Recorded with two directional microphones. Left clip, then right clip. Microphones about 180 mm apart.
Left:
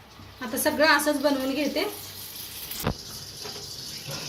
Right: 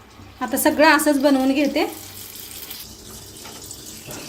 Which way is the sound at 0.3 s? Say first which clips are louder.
Right 7 dB; 60° right (ahead or behind).